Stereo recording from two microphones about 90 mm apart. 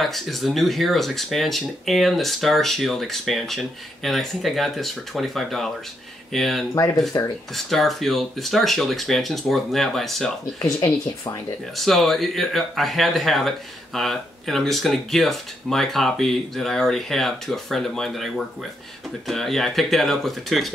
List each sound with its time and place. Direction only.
0.0 s speech: centre (ahead or behind)
7.2 s speech: 45° left (ahead or behind)
7.5 s speech: centre (ahead or behind)
11.7 s speech: centre (ahead or behind)